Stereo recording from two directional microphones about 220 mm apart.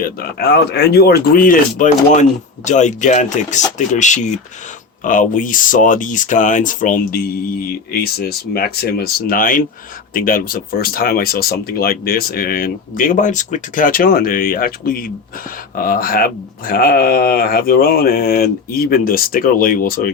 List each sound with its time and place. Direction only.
0.0 s speech: 45° left (ahead or behind)